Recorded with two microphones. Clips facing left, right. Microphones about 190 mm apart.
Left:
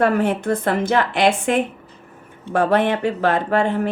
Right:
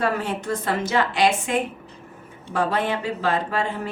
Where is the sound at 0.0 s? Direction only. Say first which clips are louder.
Left 7 dB; 60° left (ahead or behind).